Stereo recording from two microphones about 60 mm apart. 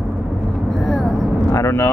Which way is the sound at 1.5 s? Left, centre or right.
Left.